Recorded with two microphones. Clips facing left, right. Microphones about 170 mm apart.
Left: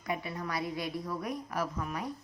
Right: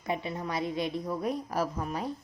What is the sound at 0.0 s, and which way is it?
A woman's voice, 25° right (ahead or behind).